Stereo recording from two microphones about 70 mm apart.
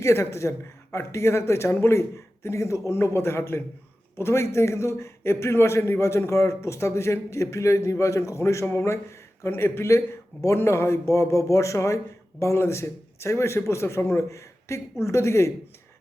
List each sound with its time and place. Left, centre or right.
0.0 s a man's voice: left